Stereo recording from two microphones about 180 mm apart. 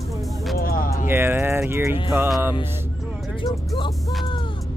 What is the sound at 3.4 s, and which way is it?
Music, 25° left (ahead or behind).